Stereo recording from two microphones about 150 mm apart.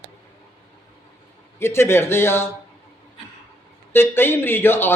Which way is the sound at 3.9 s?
15° left (ahead or behind).